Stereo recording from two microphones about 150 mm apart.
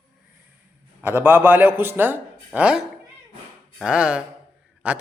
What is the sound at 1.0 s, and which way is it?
A man's voice, 15° right (ahead or behind).